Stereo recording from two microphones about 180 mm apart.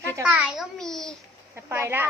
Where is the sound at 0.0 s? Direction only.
10° right (ahead or behind).